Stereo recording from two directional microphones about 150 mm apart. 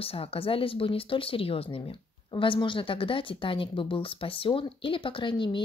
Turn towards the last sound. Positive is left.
turn(degrees=35)  # may be behind; listen again after turning